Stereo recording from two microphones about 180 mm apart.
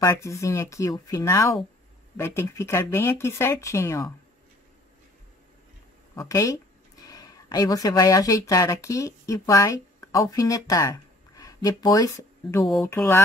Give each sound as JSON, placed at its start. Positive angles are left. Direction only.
{"t": 0.0, "sound": "speech", "side_deg": 15}
{"t": 6.1, "sound": "speech", "side_deg": 20}
{"t": 12.6, "sound": "speech", "side_deg": 0}
{"t": 12.9, "sound": "speech", "side_deg": 15}